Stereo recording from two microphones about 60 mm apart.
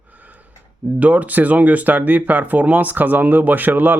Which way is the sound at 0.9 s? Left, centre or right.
Right.